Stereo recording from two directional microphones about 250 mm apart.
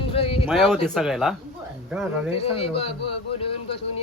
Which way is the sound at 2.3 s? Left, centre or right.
Left.